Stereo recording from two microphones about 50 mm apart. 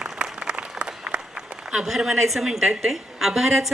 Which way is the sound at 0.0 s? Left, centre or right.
Centre.